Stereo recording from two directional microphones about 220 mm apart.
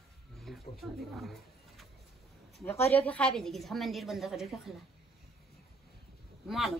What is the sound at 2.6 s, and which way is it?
A woman's voice, 10° left (ahead or behind).